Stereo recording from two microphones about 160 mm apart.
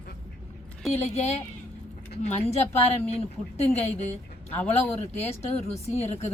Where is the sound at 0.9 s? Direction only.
40° left (ahead or behind).